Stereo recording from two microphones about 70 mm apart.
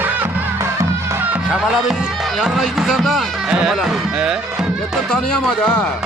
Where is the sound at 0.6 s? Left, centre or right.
Right.